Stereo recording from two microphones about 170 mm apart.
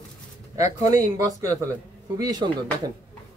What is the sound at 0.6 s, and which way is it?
Speech, 45° left (ahead or behind).